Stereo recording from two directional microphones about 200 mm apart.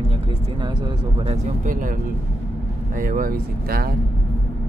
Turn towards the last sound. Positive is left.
turn(degrees=-50)  # may be behind; listen again after turning